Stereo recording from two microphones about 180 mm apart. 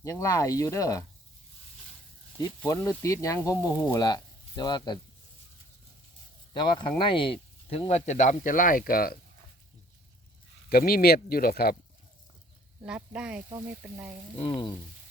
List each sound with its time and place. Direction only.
0.0 s speech: 20° left (ahead or behind)
2.6 s speech: 15° left (ahead or behind)
6.5 s speech: 25° left (ahead or behind); by 9.1 s 55° left (ahead or behind)
10.7 s speech: 55° left (ahead or behind)
12.8 s speech: 5° right (ahead or behind)
13.5 s sizzle: 15° right (ahead or behind)
14.3 s frying: 30° left (ahead or behind)